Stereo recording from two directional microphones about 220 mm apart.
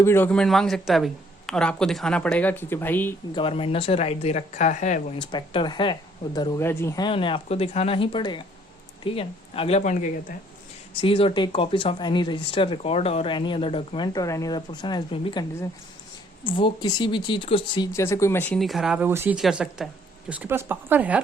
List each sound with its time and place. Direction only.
0.0 s a man's voice: 10° left (ahead or behind)
3.3 s speech: 25° left (ahead or behind)
5.1 s a man's voice: 20° left (ahead or behind); by 21.2 s 5° right (ahead or behind)